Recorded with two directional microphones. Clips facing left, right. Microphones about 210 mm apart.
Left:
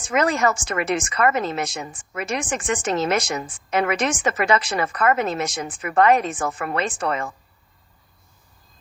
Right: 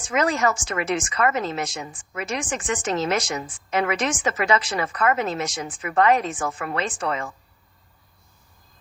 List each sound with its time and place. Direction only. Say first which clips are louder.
0.1 s a woman's voice: left 2 dB; 60° left (ahead or behind)